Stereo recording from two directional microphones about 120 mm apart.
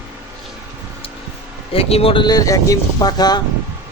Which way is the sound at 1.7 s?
55° left (ahead or behind).